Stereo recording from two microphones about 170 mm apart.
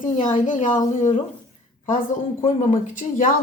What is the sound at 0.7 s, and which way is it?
Speech, 20° left (ahead or behind).